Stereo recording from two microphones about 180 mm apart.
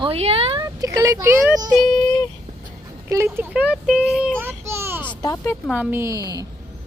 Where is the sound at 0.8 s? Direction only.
20° right (ahead or behind).